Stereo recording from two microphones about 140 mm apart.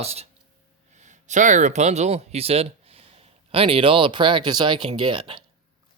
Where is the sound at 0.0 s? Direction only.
45° right (ahead or behind).